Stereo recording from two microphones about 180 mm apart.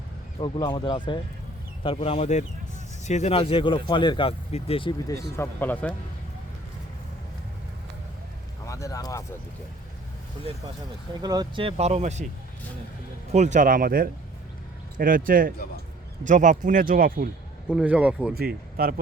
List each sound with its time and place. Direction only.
0.3 s speech: 30° left (ahead or behind)
5.4 s speech: 10° left (ahead or behind)
8.6 s speech: 15° left (ahead or behind)
11.2 s speech: 20° right (ahead or behind); by 12.2 s 40° right (ahead or behind)
13.3 s speech: 40° right (ahead or behind)
17.7 s speech: 5° right (ahead or behind)
18.3 s speech: 55° right (ahead or behind)